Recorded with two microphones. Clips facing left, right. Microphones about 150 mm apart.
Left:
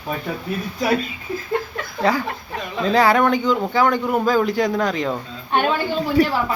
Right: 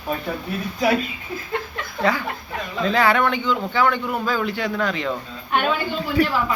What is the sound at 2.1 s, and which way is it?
Speech, 35° left (ahead or behind).